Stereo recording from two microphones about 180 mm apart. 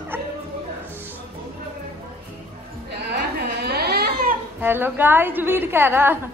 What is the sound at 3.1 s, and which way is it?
Crying, 60° right (ahead or behind).